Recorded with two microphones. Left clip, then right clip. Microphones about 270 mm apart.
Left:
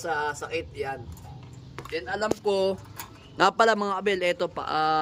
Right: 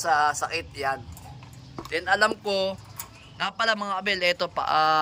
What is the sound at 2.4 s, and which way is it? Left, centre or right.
A man's voice, centre.